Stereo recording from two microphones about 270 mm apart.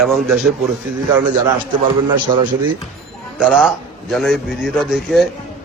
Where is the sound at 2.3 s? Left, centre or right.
Centre.